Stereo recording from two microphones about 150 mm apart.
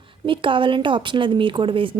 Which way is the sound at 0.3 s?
35° right (ahead or behind).